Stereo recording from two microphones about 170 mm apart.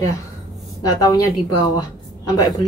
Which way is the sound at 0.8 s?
20° left (ahead or behind).